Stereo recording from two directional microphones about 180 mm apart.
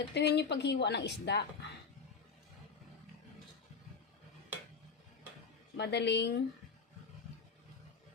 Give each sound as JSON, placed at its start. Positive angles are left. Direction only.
{"t": 0.1, "sound": "a woman's voice", "side_deg": 70}
{"t": 5.7, "sound": "a woman's voice", "side_deg": 70}